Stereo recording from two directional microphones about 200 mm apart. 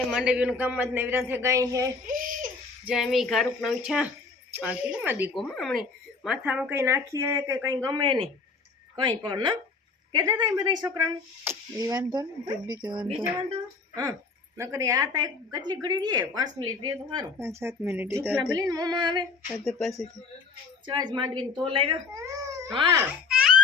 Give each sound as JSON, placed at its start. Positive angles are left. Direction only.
{"t": 0.1, "sound": "a woman's voice", "side_deg": -5}
{"t": 2.0, "sound": "babbling", "side_deg": -45}
{"t": 2.8, "sound": "a woman's voice", "side_deg": 0}
{"t": 19.6, "sound": "speech", "side_deg": 0}
{"t": 20.8, "sound": "a woman's voice", "side_deg": -20}
{"t": 23.0, "sound": "baby laughter", "side_deg": -5}